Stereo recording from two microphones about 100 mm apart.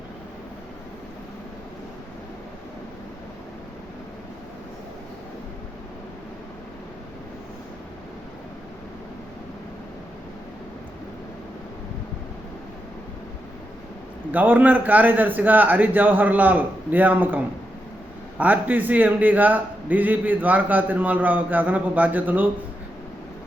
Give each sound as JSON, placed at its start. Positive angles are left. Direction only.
{"t": 14.3, "sound": "a man's voice", "side_deg": -15}